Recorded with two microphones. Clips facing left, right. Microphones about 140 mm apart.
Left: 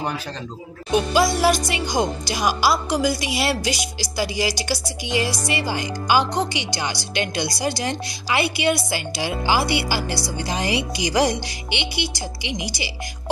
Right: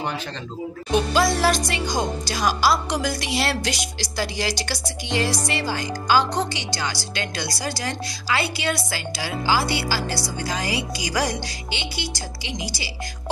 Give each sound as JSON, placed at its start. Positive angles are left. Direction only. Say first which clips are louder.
{"t": 0.9, "sound": "speech", "louder": "left 1 dB", "side_deg": 10}